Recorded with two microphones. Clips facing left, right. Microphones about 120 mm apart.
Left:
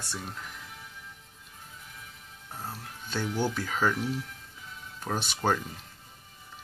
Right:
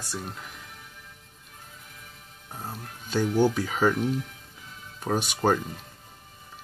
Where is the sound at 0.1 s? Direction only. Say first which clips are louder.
Right 4 dB; 5° right (ahead or behind).